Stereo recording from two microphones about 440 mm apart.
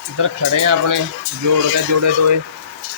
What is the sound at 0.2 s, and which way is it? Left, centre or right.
Speech, right.